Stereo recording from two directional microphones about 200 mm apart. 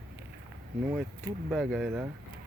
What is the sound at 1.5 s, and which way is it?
Speech, centre (ahead or behind).